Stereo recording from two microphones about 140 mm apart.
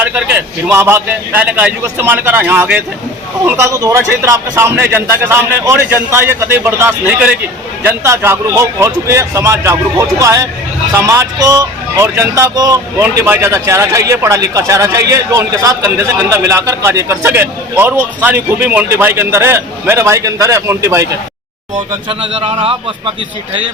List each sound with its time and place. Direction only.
0.0 s a man's voice: 15° right (ahead or behind)
22.2 s speech: 40° right (ahead or behind)